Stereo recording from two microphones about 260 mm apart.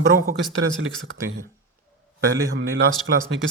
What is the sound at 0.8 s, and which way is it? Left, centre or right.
Speech, right.